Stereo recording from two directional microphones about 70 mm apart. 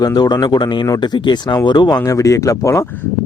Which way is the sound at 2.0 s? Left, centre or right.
Left.